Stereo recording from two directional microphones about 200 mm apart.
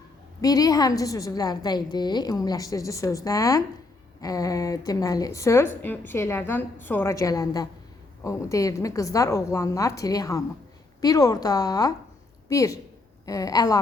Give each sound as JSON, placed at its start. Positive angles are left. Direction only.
{"t": 0.4, "sound": "a woman's voice", "side_deg": 20}